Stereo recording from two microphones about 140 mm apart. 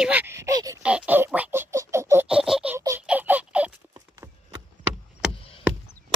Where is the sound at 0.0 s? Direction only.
10° right (ahead or behind).